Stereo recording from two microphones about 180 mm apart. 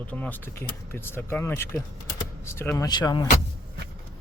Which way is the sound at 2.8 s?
20° left (ahead or behind).